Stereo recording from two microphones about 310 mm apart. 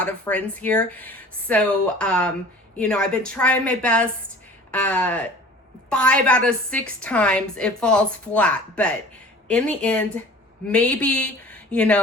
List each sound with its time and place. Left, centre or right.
0.0 s a woman's voice: centre